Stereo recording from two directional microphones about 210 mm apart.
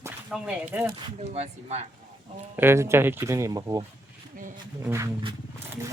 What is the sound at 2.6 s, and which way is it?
Speech, 10° right (ahead or behind).